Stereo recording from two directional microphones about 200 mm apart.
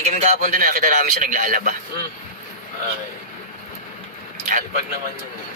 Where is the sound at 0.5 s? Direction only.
45° right (ahead or behind).